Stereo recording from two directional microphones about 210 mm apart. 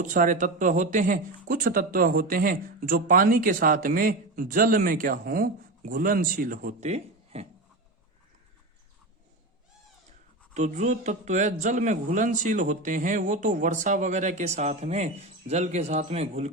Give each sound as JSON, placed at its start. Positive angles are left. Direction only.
{"t": 0.0, "sound": "speech", "side_deg": -40}
{"t": 10.5, "sound": "speech", "side_deg": -35}